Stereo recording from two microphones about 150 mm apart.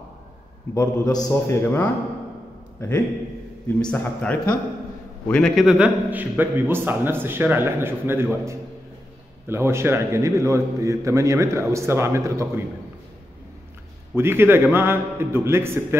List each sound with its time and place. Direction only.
0.7 s a man's voice: 20° left (ahead or behind)
3.6 s a man's voice: 10° left (ahead or behind); by 12.6 s 20° right (ahead or behind)
14.1 s a man's voice: 15° right (ahead or behind)